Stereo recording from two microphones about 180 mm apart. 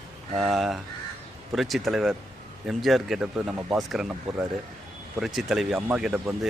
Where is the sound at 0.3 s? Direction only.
Centre (ahead or behind).